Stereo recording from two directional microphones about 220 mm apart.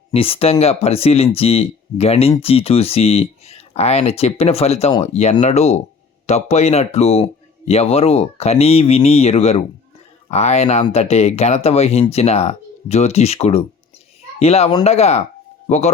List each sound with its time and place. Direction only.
0.1 s a man's voice: 25° left (ahead or behind)